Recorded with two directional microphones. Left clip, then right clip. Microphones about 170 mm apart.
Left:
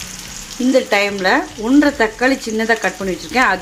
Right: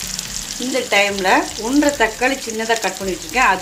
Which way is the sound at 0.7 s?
35° left (ahead or behind).